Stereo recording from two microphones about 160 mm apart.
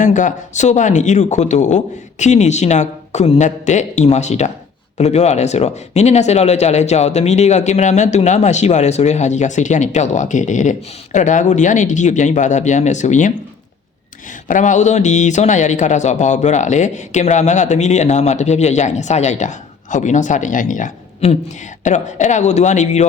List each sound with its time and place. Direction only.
0.0 s speech: 50° left (ahead or behind)
14.4 s speech: 55° left (ahead or behind)